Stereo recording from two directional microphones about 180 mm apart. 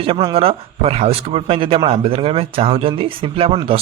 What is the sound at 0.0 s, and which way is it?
Speech, 30° right (ahead or behind).